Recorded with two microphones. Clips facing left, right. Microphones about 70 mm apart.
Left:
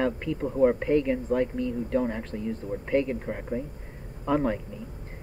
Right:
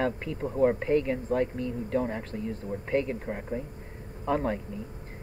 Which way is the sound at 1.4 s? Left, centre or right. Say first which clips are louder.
Left 2 dB; right.